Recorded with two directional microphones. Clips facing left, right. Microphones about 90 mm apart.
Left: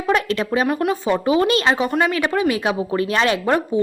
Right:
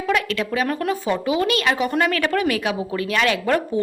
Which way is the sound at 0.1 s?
30° left (ahead or behind).